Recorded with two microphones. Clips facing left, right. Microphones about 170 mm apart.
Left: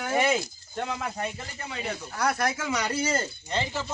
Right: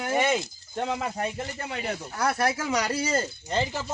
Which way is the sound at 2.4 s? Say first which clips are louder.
Right 2 dB; 30° right (ahead or behind).